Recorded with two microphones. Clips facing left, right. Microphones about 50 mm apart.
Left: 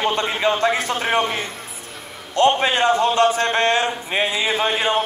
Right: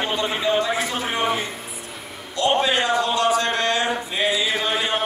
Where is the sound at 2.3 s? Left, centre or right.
Left.